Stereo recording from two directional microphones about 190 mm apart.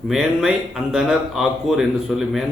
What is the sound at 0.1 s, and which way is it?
A man's voice, centre (ahead or behind).